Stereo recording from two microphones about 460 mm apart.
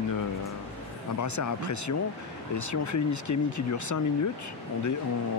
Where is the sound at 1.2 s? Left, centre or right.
Left.